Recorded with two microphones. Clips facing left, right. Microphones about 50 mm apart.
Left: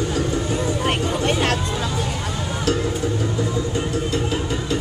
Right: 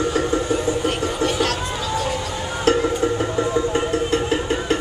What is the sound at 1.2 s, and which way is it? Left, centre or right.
Chatter, left.